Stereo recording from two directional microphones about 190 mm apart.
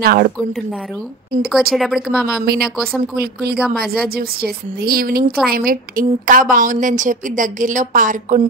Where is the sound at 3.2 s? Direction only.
55° right (ahead or behind).